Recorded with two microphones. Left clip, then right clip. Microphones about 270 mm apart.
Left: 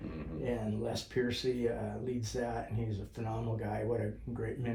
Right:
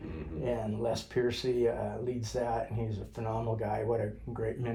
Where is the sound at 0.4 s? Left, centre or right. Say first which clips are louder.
Right 4 dB; centre.